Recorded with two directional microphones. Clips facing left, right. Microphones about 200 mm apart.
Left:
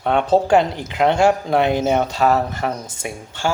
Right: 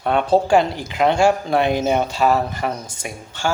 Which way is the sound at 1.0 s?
10° right (ahead or behind).